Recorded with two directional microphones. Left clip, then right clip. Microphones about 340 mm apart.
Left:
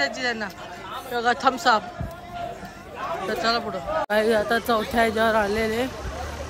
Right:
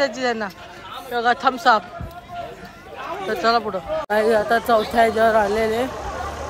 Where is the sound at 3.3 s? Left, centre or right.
Centre.